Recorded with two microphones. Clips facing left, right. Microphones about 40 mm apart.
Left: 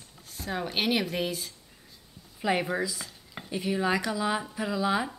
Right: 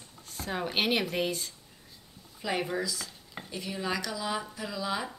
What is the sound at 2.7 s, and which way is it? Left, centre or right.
Speech, centre.